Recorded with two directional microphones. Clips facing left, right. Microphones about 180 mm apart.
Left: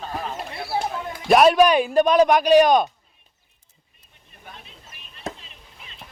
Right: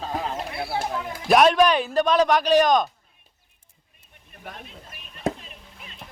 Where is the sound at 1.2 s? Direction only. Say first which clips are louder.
Left 2 dB; 5° left (ahead or behind).